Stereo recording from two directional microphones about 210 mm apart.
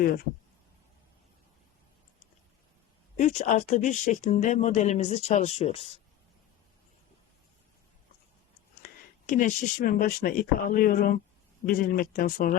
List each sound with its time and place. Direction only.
3.2 s speech: 35° left (ahead or behind)
8.8 s speech: 40° left (ahead or behind)